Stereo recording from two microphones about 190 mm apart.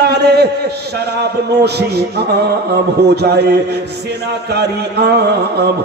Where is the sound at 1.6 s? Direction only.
60° right (ahead or behind).